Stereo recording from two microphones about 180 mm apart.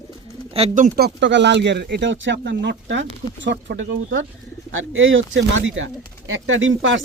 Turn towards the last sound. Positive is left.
turn(degrees=-90)